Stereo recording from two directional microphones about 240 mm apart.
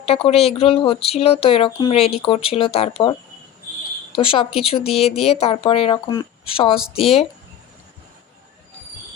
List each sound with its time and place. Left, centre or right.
0.0 s speech: left
4.2 s speech: left